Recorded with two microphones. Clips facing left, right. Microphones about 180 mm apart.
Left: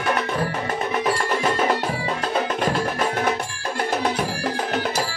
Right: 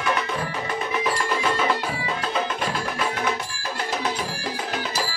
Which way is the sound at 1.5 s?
45° left (ahead or behind).